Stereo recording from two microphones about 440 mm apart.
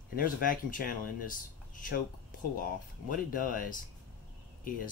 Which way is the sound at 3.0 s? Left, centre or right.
Centre.